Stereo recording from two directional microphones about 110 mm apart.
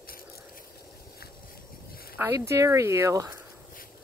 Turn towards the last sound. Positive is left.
turn(degrees=-30)  # may be behind; listen again after turning